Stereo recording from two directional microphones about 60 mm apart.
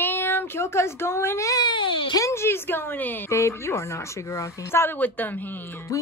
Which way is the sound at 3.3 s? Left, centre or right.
Left.